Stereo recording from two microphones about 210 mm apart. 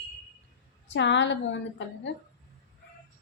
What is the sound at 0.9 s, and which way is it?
Speech, 60° left (ahead or behind).